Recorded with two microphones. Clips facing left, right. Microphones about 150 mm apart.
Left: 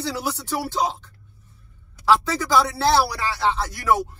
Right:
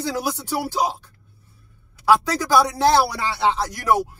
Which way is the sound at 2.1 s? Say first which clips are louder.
Right 2 dB; 15° right (ahead or behind).